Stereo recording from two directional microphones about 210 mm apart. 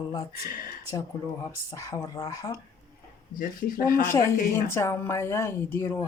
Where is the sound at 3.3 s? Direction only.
40° left (ahead or behind).